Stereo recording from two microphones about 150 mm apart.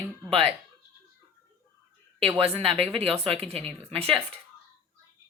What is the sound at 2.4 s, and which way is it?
Speech, 40° right (ahead or behind).